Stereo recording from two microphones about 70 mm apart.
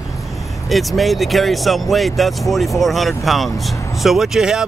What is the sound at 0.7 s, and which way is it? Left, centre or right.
Speech, centre.